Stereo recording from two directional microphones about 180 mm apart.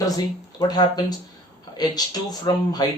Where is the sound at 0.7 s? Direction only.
20° left (ahead or behind).